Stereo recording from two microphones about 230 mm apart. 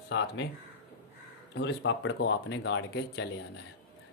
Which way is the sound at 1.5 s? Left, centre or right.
Left.